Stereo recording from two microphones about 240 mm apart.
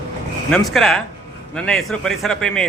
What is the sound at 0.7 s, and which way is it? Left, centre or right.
A man's voice, centre.